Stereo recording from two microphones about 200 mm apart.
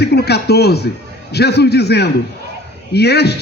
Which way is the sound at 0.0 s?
55° left (ahead or behind).